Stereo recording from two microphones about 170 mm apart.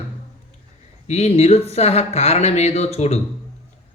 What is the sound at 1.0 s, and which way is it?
Speech, 40° left (ahead or behind).